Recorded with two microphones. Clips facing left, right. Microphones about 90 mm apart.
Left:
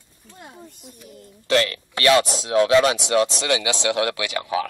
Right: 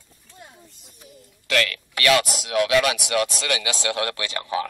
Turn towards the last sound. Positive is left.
turn(degrees=15)  # may be behind; listen again after turning